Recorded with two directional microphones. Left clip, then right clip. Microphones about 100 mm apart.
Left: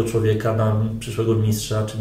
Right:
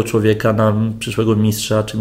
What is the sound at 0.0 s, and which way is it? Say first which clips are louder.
Mantra: right 5 dB; 40° right (ahead or behind).